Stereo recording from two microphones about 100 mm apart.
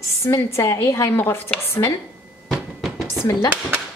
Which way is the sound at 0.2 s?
25° left (ahead or behind).